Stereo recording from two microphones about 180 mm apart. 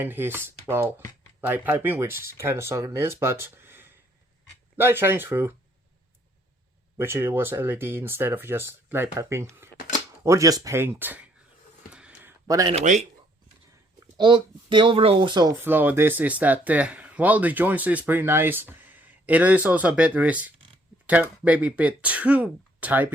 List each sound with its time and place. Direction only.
0.0 s speech: 10° right (ahead or behind)
6.9 s speech: 15° right (ahead or behind)
11.9 s a sound: 5° right (ahead or behind)
12.5 s speech: 20° right (ahead or behind)
12.7 s speech: 40° right (ahead or behind)
14.2 s speech: 25° right (ahead or behind)
15.5 s speech: 10° right (ahead or behind)